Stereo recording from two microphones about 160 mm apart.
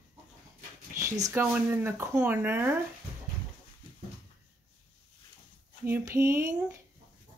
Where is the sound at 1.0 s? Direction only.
20° right (ahead or behind).